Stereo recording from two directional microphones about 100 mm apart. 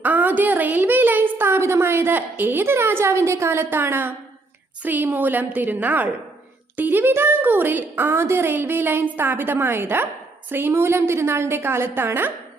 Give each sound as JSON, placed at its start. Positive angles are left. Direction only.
{"t": 0.0, "sound": "a woman's voice", "side_deg": -15}